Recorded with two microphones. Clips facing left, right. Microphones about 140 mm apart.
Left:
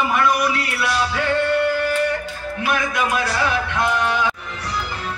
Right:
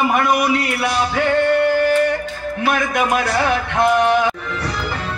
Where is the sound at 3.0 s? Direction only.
50° right (ahead or behind).